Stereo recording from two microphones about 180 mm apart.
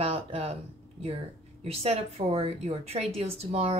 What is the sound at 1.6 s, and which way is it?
Speech, 35° right (ahead or behind).